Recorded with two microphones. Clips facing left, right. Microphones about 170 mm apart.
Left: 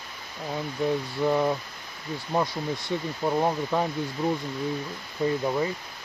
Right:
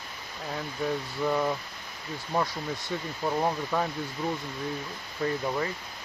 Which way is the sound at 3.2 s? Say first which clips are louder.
Left 3 dB; 15° left (ahead or behind).